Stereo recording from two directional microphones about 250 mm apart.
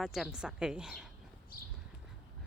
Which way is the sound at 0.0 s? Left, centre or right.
Centre.